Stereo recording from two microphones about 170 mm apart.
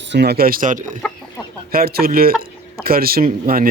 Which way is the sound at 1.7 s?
60° right (ahead or behind).